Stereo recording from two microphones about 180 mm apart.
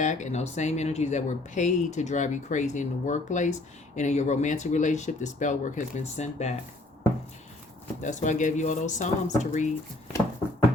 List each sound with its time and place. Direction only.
0.0 s speech: 40° left (ahead or behind)
8.0 s speech: 45° left (ahead or behind)